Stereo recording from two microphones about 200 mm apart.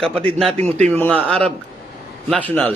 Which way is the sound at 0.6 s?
35° right (ahead or behind).